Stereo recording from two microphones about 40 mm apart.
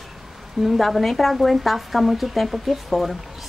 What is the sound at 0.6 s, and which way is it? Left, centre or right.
Speech, centre.